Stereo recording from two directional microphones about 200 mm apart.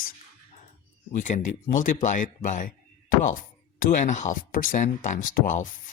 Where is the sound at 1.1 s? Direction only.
40° left (ahead or behind).